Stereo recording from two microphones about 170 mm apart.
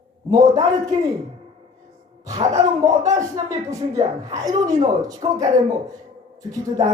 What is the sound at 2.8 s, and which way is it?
Speech, 20° right (ahead or behind).